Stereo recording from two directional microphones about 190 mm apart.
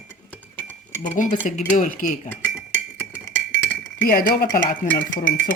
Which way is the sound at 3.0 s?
15° left (ahead or behind).